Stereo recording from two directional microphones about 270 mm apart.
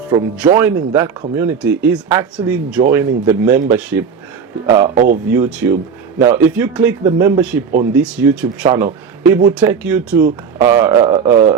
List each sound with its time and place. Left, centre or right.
0.1 s speech: centre
4.9 s speech: right
5.3 s speech: centre